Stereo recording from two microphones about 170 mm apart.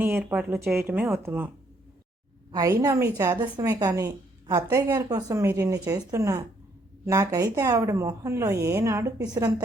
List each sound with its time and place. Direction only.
0.3 s speech: 15° right (ahead or behind)
2.5 s a woman's voice: 20° right (ahead or behind)